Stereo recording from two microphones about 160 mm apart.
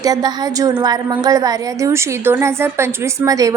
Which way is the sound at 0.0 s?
25° right (ahead or behind).